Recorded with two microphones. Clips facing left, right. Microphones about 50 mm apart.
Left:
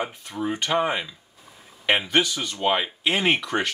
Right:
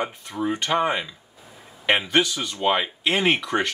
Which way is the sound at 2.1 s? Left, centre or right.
Centre.